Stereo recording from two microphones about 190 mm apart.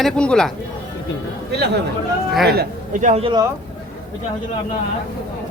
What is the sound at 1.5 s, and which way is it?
A man's voice, 60° right (ahead or behind).